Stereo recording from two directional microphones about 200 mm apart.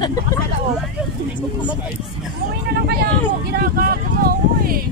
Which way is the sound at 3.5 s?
50° right (ahead or behind).